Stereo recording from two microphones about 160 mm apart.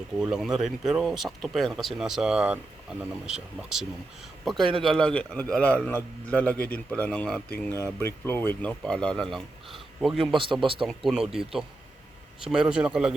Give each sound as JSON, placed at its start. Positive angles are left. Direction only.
{"t": 0.2, "sound": "a man's voice", "side_deg": -5}
{"t": 10.2, "sound": "speech", "side_deg": -30}
{"t": 10.8, "sound": "speech", "side_deg": 0}